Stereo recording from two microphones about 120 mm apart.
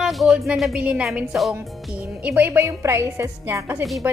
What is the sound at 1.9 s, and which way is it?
A woman's voice, 10° right (ahead or behind).